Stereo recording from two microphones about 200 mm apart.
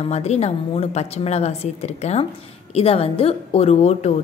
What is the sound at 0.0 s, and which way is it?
A woman's voice, 35° left (ahead or behind).